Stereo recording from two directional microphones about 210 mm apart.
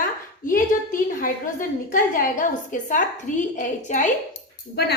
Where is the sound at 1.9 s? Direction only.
40° left (ahead or behind).